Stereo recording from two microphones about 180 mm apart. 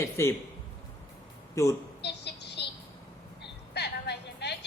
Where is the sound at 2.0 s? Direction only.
70° left (ahead or behind).